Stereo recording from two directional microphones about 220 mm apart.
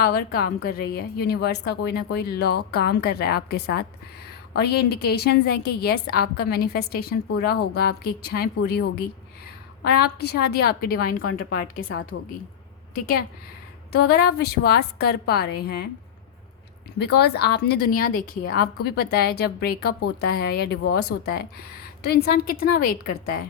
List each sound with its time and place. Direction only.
0.0 s a woman's voice: 45° left (ahead or behind)
12.1 s speech: 55° left (ahead or behind)
13.9 s a woman's voice: 45° left (ahead or behind)
17.2 s a woman's voice: 50° left (ahead or behind)
22.0 s a woman's voice: 45° left (ahead or behind)